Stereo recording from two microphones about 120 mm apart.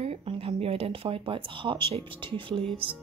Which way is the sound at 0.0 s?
55° right (ahead or behind).